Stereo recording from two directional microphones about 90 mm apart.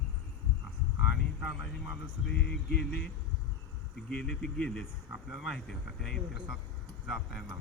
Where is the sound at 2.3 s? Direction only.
10° left (ahead or behind).